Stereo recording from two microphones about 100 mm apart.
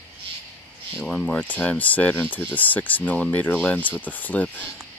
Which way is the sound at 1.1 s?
10° left (ahead or behind).